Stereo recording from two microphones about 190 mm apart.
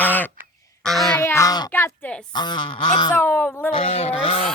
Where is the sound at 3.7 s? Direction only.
30° left (ahead or behind).